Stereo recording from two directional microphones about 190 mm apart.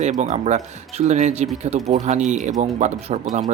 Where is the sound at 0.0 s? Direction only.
40° right (ahead or behind).